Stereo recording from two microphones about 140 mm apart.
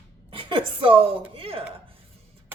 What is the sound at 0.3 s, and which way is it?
A woman's voice, 40° right (ahead or behind).